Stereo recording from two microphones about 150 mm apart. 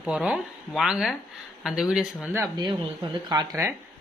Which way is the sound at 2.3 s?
25° right (ahead or behind).